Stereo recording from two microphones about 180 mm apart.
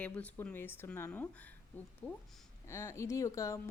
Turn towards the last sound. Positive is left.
turn(degrees=15)  # may be behind; listen again after turning